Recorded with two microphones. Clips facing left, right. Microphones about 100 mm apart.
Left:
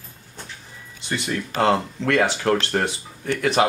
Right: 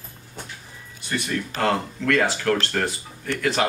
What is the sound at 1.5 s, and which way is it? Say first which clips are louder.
Speech: left 4 dB; 20° left (ahead or behind).